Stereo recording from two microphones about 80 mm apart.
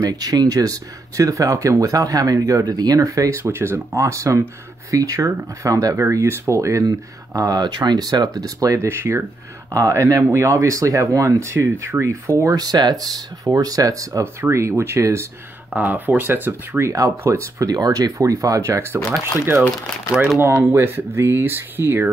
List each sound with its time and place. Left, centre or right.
0.0 s speech: right
5.9 s speech: right
8.7 s speech: right
12.5 s speech: right
14.2 s speech: right
15.7 s speech: centre
16.9 s speech: right
17.6 s speech: right
18.7 s speech: right
20.5 s speech: right